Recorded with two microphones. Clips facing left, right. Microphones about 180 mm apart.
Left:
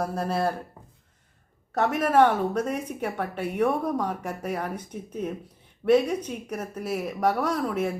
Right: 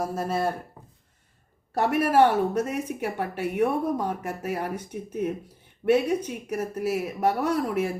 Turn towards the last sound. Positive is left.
turn(degrees=-10)  # may be behind; listen again after turning